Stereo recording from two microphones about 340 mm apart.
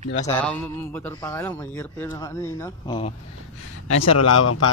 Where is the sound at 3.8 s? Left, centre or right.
Left.